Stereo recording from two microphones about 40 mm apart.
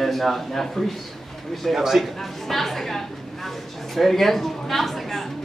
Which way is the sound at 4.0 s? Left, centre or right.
Centre.